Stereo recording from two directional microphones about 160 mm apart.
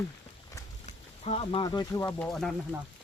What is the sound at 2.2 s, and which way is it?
Speech, 5° left (ahead or behind).